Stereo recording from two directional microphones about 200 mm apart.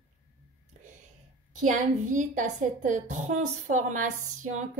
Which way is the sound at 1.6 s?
40° right (ahead or behind).